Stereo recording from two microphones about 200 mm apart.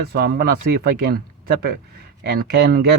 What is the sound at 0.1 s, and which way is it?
Speech, 50° right (ahead or behind).